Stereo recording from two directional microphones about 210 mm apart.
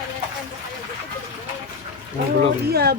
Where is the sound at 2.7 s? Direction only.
50° right (ahead or behind).